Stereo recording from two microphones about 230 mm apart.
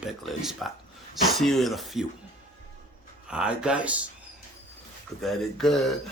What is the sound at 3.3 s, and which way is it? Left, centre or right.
Speech, centre.